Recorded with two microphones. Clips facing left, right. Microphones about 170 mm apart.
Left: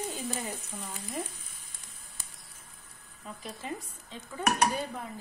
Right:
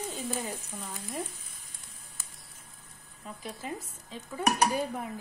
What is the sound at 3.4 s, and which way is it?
Speech, centre (ahead or behind).